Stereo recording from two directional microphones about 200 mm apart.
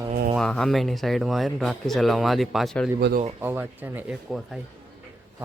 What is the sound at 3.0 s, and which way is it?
Speech, 50° right (ahead or behind).